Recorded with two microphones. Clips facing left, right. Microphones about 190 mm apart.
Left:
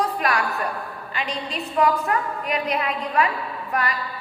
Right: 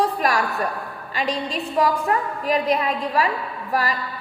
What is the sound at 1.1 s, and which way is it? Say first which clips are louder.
A woman's voice: right 4 dB; 35° right (ahead or behind).